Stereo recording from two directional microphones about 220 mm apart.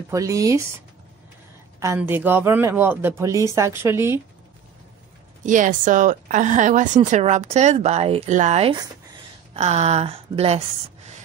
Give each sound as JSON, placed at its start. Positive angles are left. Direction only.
{"t": 0.1, "sound": "speech", "side_deg": -15}
{"t": 1.8, "sound": "speech", "side_deg": -10}
{"t": 5.4, "sound": "speech", "side_deg": -35}